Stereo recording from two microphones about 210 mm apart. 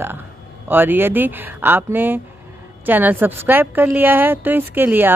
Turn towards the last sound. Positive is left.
turn(degrees=-10)  # may be behind; listen again after turning